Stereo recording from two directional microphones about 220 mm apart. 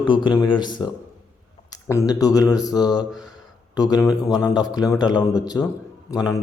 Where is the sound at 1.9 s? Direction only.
15° left (ahead or behind).